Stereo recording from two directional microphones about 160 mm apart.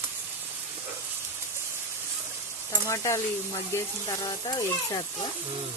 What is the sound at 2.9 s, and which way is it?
Speech, 20° left (ahead or behind).